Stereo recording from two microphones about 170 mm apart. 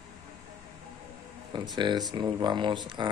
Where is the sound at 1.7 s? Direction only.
25° right (ahead or behind).